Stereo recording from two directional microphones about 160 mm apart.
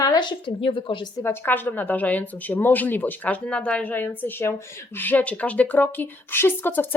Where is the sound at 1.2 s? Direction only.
15° left (ahead or behind).